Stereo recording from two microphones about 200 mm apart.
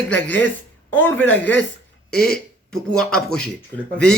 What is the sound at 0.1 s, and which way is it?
A man's voice, 10° left (ahead or behind).